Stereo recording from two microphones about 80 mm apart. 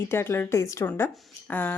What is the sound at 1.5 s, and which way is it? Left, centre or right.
Speech, left.